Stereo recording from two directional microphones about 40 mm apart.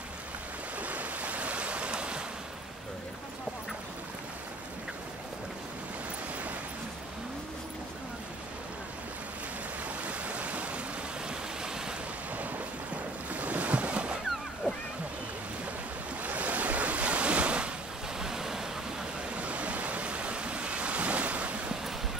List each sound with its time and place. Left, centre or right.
0.7 s waves: right
10.0 s stream: right
11.2 s waves: centre
13.3 s boat: right
16.2 s waves: right
18.2 s waves: centre
19.3 s thunder: right